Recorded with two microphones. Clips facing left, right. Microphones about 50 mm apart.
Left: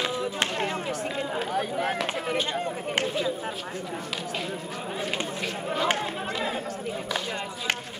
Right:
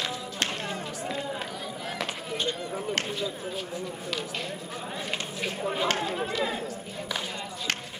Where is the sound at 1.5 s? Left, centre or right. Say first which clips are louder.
Left 9 dB; left.